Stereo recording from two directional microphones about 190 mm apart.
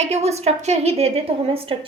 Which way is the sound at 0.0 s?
35° right (ahead or behind).